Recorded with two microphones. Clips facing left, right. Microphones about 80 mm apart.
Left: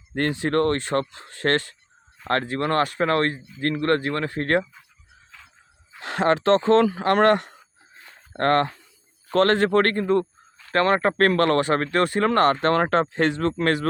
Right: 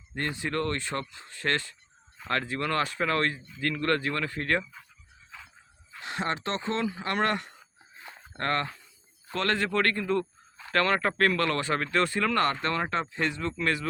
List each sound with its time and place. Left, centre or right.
0.1 s speech: left
2.2 s speech: left
6.0 s speech: left
8.4 s speech: left
11.2 s speech: left